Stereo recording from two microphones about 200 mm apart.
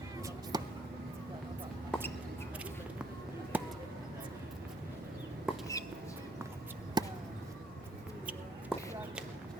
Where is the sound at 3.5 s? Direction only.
10° right (ahead or behind).